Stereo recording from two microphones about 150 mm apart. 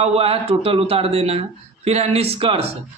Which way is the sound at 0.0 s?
40° right (ahead or behind).